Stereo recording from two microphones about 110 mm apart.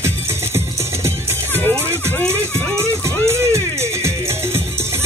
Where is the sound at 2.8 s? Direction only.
25° right (ahead or behind).